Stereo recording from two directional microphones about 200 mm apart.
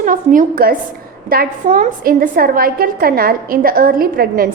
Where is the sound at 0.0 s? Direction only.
40° right (ahead or behind).